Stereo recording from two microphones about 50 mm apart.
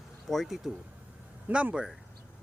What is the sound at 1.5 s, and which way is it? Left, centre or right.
Speech, right.